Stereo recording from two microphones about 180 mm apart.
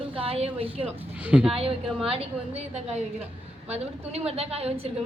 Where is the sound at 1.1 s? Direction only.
10° right (ahead or behind).